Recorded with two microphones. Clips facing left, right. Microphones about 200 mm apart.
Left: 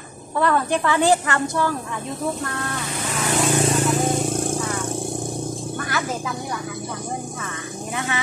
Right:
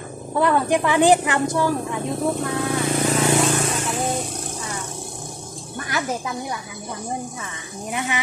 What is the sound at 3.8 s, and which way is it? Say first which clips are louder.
Vehicle: left 5 dB; 40° left (ahead or behind).